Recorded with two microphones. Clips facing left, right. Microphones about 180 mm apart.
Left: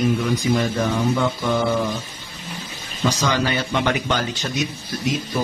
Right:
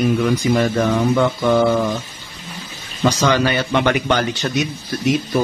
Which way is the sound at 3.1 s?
65° right (ahead or behind).